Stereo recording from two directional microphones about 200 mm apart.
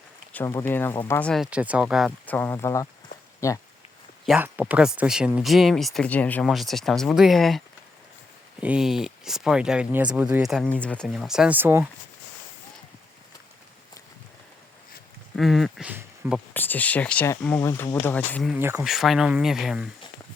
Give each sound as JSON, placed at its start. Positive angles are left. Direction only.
{"t": 0.3, "sound": "speech", "side_deg": 10}
{"t": 4.3, "sound": "speech", "side_deg": -10}
{"t": 8.6, "sound": "speech", "side_deg": -5}
{"t": 15.4, "sound": "speech", "side_deg": 0}
{"t": 16.6, "sound": "speech", "side_deg": 10}
{"t": 18.5, "sound": "speech", "side_deg": -10}